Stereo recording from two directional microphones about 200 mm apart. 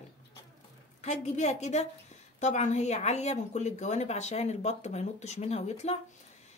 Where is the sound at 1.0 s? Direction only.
35° left (ahead or behind).